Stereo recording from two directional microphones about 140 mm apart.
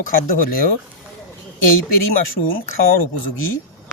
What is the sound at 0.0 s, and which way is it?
Speech, 80° left.